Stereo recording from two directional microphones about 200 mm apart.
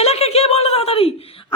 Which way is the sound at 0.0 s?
30° left (ahead or behind).